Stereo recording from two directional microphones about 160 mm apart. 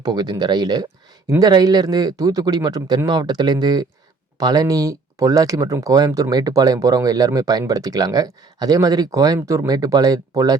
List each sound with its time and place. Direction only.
0.0 s speech: 25° right (ahead or behind)